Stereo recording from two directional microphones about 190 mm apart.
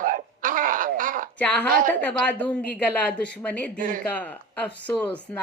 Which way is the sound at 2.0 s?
10° left (ahead or behind).